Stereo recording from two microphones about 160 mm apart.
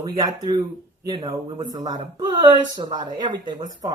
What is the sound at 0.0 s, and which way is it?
A woman's voice, 25° right (ahead or behind).